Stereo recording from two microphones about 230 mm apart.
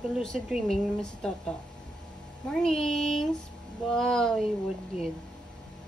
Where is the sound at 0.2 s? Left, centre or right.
Centre.